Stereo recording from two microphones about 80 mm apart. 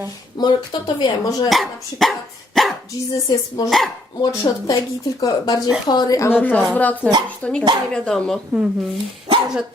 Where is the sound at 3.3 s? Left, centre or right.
Left.